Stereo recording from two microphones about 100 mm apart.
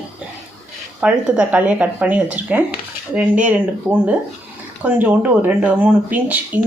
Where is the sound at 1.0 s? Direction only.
10° right (ahead or behind).